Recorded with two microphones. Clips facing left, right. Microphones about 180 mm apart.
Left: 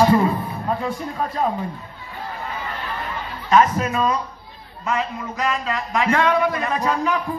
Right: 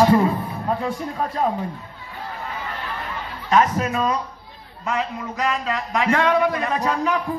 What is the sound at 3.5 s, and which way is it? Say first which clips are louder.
A man's voice: left 2 dB; 65° right (ahead or behind).